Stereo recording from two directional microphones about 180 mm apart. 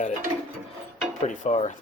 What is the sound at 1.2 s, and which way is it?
Speech, 40° left (ahead or behind).